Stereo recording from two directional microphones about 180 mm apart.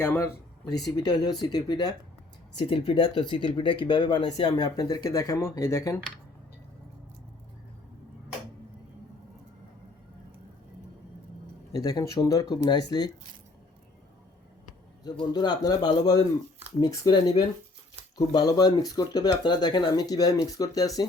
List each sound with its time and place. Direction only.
0.0 s speech: 15° left (ahead or behind)
11.7 s speech: 20° left (ahead or behind)
15.2 s speech: 25° left (ahead or behind)